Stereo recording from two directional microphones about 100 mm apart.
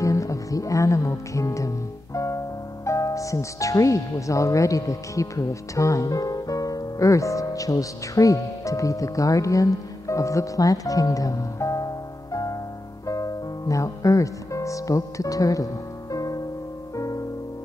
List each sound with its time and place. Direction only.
0.0 s music: 30° left (ahead or behind)
2.1 s speech: 30° left (ahead or behind)
13.0 s music: 35° left (ahead or behind)